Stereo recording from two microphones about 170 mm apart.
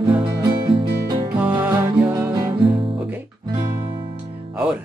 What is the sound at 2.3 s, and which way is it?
Music, 25° right (ahead or behind).